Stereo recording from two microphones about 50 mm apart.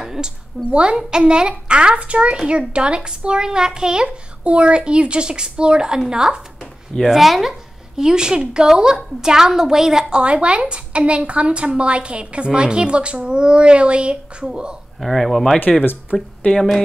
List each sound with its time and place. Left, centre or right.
0.0 s a sound: centre
0.7 s a woman's voice: centre
7.1 s speech: centre
15.0 s speech: centre
16.1 s speech: left
16.5 s speech: centre